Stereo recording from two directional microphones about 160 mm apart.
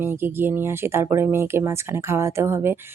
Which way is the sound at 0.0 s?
15° right (ahead or behind).